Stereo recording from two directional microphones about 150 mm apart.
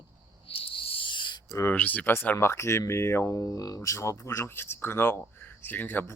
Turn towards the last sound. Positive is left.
turn(degrees=10)  # may be behind; listen again after turning